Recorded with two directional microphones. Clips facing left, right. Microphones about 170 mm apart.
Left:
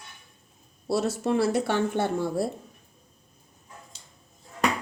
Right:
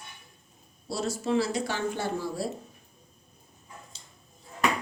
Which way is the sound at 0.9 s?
60° left (ahead or behind).